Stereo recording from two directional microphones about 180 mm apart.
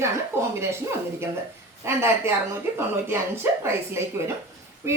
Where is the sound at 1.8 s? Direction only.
15° right (ahead or behind).